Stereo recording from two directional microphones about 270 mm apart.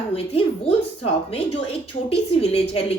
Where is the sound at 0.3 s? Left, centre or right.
Left.